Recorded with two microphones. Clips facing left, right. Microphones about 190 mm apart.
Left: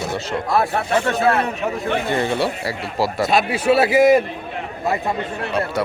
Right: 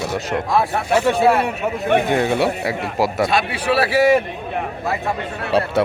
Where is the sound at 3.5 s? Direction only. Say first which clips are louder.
Left 3 dB; 25° left (ahead or behind).